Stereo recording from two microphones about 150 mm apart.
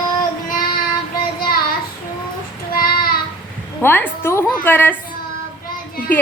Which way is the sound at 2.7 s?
80° left.